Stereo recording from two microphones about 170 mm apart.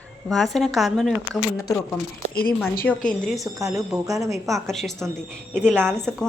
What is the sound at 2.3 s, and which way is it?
Speech, 60° left (ahead or behind).